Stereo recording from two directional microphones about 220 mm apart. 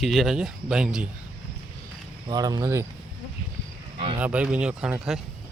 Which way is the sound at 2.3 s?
15° right (ahead or behind).